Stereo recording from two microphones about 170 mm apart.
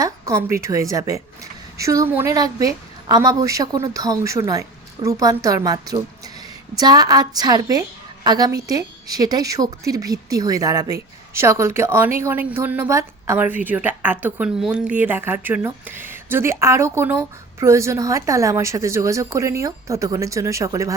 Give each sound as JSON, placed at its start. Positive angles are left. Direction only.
{"t": 0.0, "sound": "a woman's voice", "side_deg": -15}